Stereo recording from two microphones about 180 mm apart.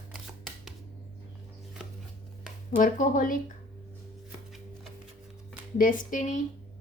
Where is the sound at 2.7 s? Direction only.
45° left (ahead or behind).